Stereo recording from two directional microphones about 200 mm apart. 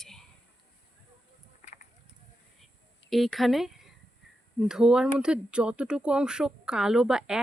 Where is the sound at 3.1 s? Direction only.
Centre (ahead or behind).